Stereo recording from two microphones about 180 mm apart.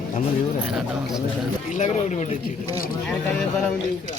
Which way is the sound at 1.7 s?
45° left (ahead or behind).